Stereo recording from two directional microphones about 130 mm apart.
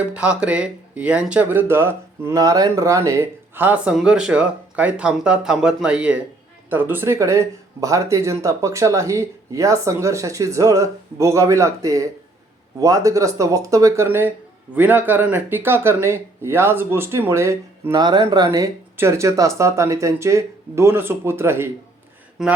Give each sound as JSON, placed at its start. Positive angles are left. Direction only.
{"t": 0.1, "sound": "speech", "side_deg": -10}
{"t": 22.4, "sound": "speech", "side_deg": 0}